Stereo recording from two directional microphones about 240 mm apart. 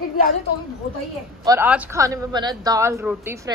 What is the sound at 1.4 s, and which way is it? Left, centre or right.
A woman's voice, centre.